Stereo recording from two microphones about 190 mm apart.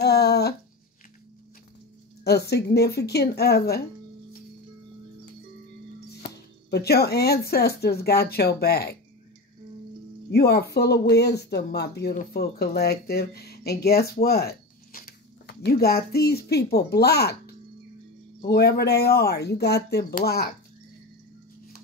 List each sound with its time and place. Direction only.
0.0 s a sound: 60° left (ahead or behind)
2.5 s speech: 60° left (ahead or behind)
6.3 s speech: 60° left (ahead or behind)
10.3 s speech: 55° left (ahead or behind)
18.5 s speech: 60° left (ahead or behind)